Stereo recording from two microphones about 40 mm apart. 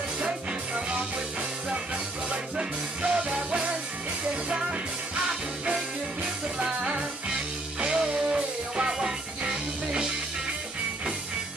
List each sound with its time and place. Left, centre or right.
0.2 s music: right
2.2 s music: right
6.8 s music: right